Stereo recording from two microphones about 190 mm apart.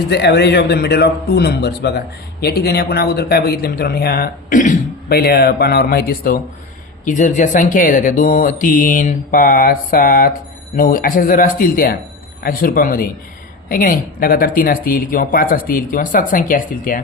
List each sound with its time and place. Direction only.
0.1 s a man's voice: 60° left (ahead or behind)